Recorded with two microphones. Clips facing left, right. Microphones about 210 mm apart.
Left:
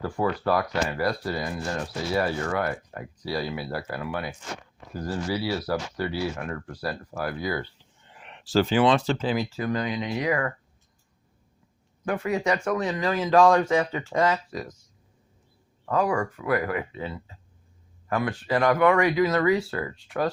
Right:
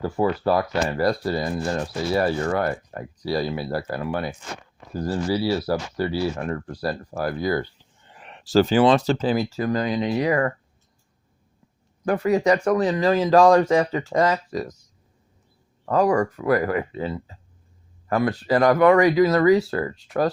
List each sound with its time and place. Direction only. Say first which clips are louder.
0.0 s speech: right 4 dB; 25° right (ahead or behind)
0.9 s speech: right 5 dB; 35° right (ahead or behind)
12.0 s speech: right 6 dB; 35° right (ahead or behind)
15.9 s speech: right 5 dB; 40° right (ahead or behind)